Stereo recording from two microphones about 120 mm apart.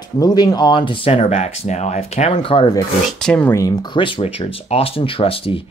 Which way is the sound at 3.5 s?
35° left (ahead or behind).